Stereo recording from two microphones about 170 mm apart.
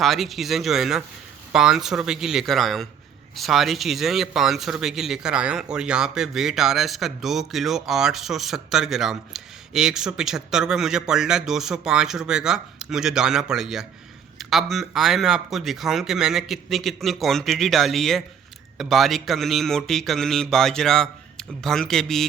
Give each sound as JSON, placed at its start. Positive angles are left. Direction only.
{"t": 0.0, "sound": "speech", "side_deg": 0}